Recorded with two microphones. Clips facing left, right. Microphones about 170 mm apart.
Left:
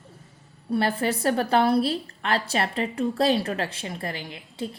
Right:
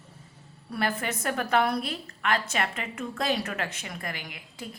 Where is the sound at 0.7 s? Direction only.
30° left (ahead or behind).